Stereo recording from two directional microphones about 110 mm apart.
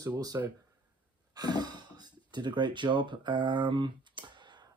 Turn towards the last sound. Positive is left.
turn(degrees=-45)  # may be behind; listen again after turning